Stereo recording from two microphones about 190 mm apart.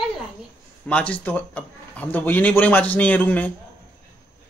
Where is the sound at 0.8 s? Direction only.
5° left (ahead or behind).